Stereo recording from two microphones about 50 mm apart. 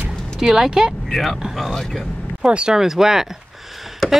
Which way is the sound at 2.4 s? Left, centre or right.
Centre.